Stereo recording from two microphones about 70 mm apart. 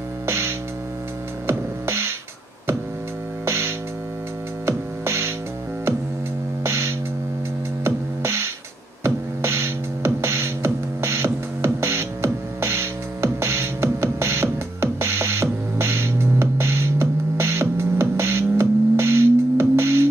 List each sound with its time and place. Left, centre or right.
1.5 s music: right
3.4 s mains hum: right
4.6 s music: right
6.6 s music: right
9.0 s a sound: right